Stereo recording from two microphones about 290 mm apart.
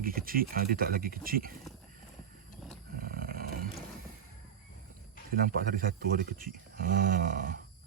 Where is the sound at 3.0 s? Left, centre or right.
Right.